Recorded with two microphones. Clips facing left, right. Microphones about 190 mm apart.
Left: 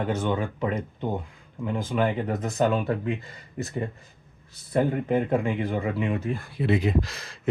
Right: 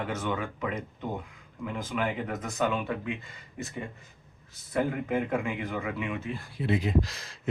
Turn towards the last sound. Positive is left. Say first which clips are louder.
# left 1 dB
turn(degrees=60)  # may be behind; listen again after turning